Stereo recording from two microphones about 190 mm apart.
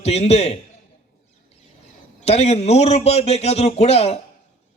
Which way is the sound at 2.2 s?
35° left (ahead or behind).